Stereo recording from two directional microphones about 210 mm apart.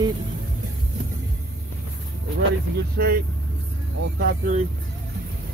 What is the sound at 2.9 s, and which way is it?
Speech, 45° right (ahead or behind).